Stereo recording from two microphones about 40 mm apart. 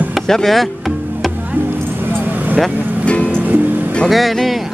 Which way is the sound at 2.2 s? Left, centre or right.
Right.